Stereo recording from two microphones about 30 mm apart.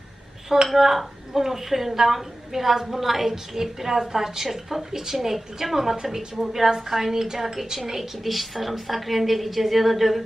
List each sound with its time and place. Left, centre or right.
0.7 s a woman's voice: centre